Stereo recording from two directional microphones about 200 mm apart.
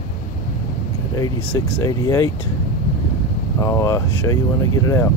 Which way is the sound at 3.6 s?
15° left (ahead or behind).